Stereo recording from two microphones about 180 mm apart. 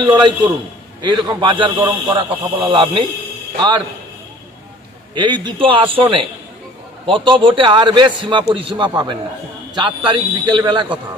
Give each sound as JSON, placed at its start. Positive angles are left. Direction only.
{"t": 0.0, "sound": "a man's voice", "side_deg": -25}
{"t": 1.8, "sound": "a man's voice", "side_deg": -15}
{"t": 2.1, "sound": "a man's voice", "side_deg": -25}
{"t": 5.1, "sound": "a man's voice", "side_deg": -25}